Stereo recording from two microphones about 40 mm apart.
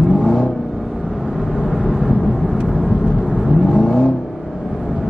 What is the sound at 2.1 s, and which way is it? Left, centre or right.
Vehicle, left.